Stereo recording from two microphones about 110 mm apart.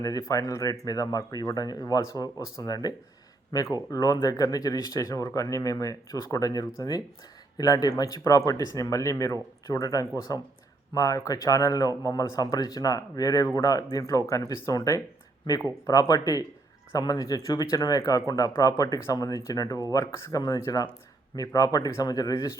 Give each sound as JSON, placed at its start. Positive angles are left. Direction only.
{"t": 0.0, "sound": "speech", "side_deg": 30}